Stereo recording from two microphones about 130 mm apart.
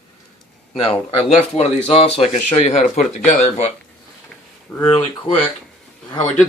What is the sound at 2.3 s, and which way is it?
Speech, 70° left (ahead or behind).